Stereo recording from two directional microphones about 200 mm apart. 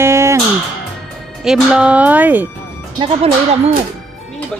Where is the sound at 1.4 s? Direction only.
5° right (ahead or behind).